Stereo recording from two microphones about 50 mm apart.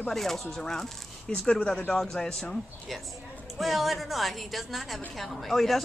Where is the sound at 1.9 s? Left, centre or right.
Centre.